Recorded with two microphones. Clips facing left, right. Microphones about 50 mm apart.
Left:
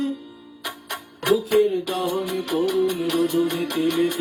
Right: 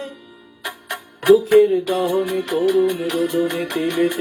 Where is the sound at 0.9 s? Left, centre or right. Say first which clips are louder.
Right 8 dB; right.